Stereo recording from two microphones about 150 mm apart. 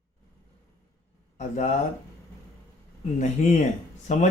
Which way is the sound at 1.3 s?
55° left (ahead or behind).